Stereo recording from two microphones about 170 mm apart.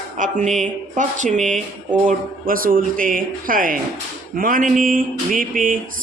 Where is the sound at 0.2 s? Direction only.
45° right (ahead or behind).